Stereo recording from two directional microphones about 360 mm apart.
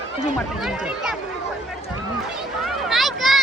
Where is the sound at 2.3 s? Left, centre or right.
Centre.